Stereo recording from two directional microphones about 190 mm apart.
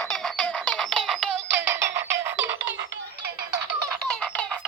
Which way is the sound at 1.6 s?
15° right (ahead or behind).